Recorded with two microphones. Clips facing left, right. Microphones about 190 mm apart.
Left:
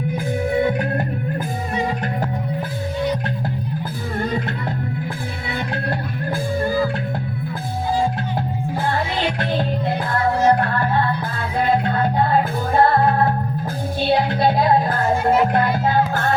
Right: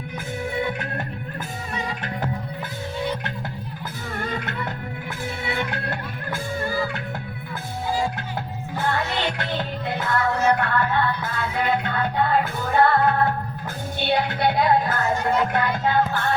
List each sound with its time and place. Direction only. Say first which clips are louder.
4.2 s music: left 6 dB; 35° left (ahead or behind)
5.7 s music: left 5 dB; 35° left (ahead or behind)
9.4 s music: left 6 dB; 30° left (ahead or behind)
15.1 s music: left 6 dB; 10° left (ahead or behind)
15.5 s music: left 4 dB; 30° left (ahead or behind)